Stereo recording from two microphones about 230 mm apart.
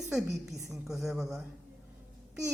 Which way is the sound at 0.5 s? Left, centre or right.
Centre.